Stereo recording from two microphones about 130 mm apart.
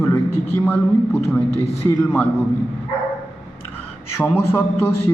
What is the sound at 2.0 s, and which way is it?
Speech, 15° left (ahead or behind).